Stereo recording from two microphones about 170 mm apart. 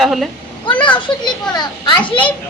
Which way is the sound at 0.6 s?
30° left (ahead or behind).